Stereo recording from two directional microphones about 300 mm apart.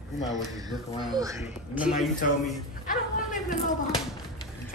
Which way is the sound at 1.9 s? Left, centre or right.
Left.